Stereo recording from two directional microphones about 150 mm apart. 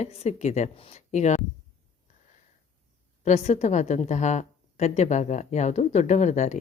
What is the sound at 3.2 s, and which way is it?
A woman's voice, 45° left (ahead or behind).